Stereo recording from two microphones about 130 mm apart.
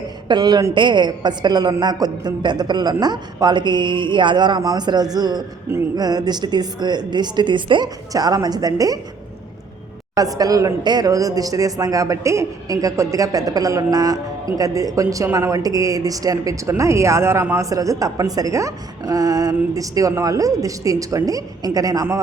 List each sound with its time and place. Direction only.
0.3 s a woman's voice: 30° right (ahead or behind)
10.2 s speech: 30° right (ahead or behind)